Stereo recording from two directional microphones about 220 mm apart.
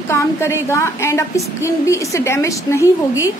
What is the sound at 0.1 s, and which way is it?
A woman's voice, 10° left (ahead or behind).